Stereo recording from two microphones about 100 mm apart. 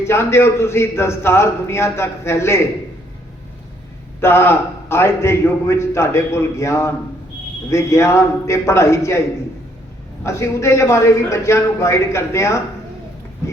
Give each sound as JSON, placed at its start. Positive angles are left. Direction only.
{"t": 0.1, "sound": "a man's voice", "side_deg": 25}
{"t": 4.2, "sound": "a man's voice", "side_deg": 25}
{"t": 10.2, "sound": "a man's voice", "side_deg": 30}